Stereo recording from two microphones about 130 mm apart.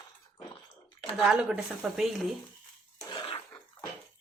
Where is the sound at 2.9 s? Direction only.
35° left (ahead or behind).